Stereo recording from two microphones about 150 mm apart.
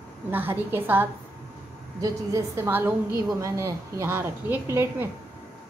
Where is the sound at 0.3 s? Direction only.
15° right (ahead or behind).